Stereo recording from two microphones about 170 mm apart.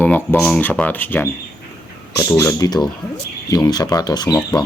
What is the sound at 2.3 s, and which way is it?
Speech, 15° left (ahead or behind).